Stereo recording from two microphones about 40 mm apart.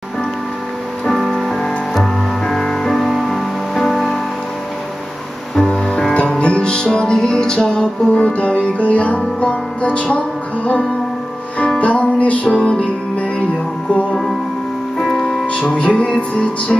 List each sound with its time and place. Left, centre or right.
1.0 s music: centre
5.6 s music: left
8.1 s music: left
11.8 s music: left
12.4 s music: centre
14.1 s music: centre
15.4 s music: left